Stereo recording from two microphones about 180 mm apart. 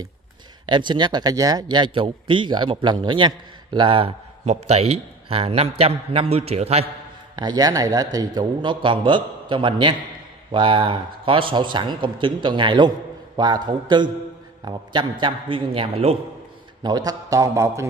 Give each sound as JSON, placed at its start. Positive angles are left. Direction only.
{"t": 0.7, "sound": "a man's voice", "side_deg": -25}
{"t": 7.3, "sound": "a man's voice", "side_deg": -20}
{"t": 16.8, "sound": "a man's voice", "side_deg": -20}